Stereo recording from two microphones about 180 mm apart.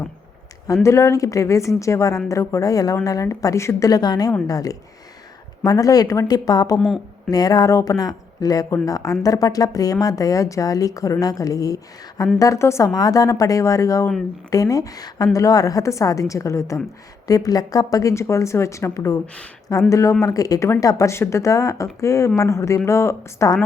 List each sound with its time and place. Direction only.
0.7 s a woman's voice: 15° left (ahead or behind)
6.7 s a woman's voice: centre (ahead or behind)
7.3 s a woman's voice: 20° left (ahead or behind)
19.2 s a woman's voice: 5° left (ahead or behind)
19.9 s a woman's voice: 15° left (ahead or behind)